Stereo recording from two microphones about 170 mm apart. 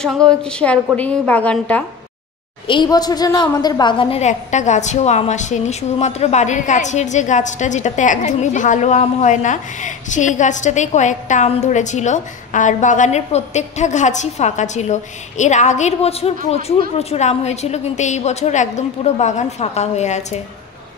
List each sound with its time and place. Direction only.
0.0 s a woman's voice: 5° left (ahead or behind)
2.7 s a woman's voice: 25° left (ahead or behind); by 20.3 s 40° left (ahead or behind)